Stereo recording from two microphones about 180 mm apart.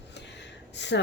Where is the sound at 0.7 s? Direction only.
75° left (ahead or behind).